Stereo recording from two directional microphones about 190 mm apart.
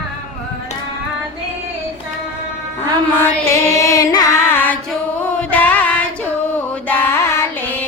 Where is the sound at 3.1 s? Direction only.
15° left (ahead or behind).